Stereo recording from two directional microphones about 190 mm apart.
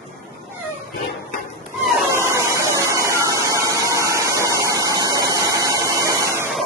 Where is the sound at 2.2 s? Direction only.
15° right (ahead or behind).